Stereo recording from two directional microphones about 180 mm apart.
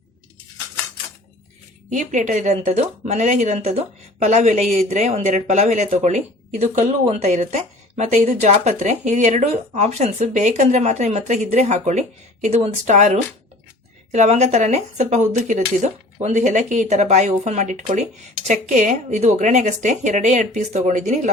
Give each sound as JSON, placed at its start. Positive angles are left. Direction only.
{"t": 1.9, "sound": "speech", "side_deg": -40}